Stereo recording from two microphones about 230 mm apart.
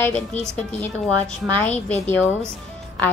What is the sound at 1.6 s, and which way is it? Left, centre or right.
Speech, centre.